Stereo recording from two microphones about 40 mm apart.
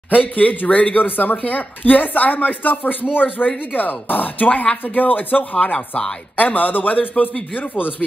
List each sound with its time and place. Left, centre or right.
0.1 s speech: left